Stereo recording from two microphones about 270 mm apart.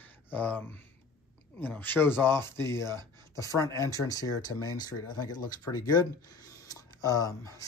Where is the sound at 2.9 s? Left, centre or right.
Centre.